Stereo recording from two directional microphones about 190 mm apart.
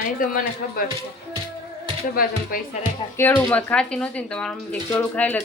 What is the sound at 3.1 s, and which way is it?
Speech, 10° left (ahead or behind).